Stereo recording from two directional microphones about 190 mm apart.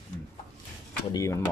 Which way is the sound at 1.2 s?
15° left (ahead or behind).